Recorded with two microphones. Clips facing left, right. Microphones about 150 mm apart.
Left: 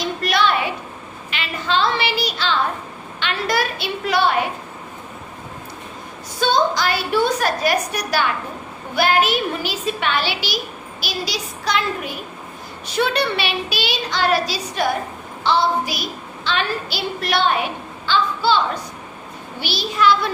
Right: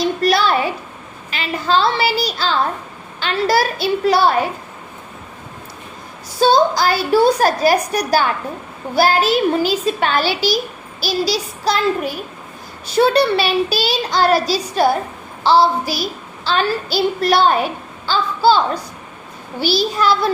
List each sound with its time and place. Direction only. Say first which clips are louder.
0.2 s a sound: right 1 dB; 35° right (ahead or behind)
1.3 s a woman's voice: right 5 dB; 40° right (ahead or behind)
6.4 s a child's voice: right 5 dB; 35° right (ahead or behind)